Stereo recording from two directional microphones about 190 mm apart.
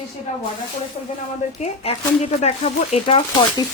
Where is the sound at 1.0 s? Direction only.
30° left (ahead or behind).